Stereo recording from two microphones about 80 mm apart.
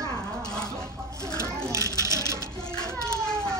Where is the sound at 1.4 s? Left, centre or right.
Right.